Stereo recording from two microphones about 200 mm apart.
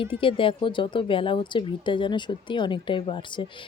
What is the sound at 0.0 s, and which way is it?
Speech, 25° left (ahead or behind).